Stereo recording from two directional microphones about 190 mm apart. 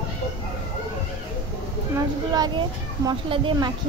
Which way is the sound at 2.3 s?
20° right (ahead or behind).